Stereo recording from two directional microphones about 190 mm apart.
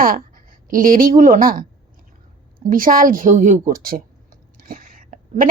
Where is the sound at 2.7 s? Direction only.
45° right (ahead or behind).